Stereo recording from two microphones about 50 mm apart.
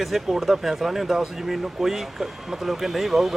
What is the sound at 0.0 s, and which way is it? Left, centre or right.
Speech, centre.